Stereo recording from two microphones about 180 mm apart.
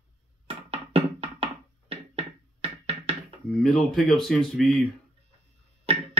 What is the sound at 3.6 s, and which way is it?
Speech, centre (ahead or behind).